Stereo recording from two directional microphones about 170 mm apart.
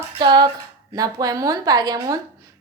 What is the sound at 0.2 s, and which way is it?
A woman's voice, 25° right (ahead or behind).